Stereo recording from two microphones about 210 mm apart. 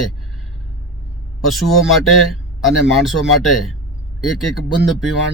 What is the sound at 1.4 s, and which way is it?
A man's voice, centre (ahead or behind).